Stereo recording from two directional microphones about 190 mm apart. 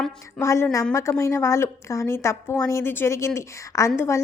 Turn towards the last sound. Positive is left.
turn(degrees=15)  # may be behind; listen again after turning